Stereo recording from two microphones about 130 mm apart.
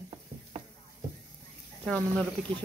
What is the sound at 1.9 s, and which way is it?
Speech, 10° left (ahead or behind).